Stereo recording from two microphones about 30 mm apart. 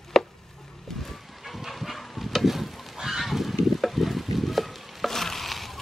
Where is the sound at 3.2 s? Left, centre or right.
Centre.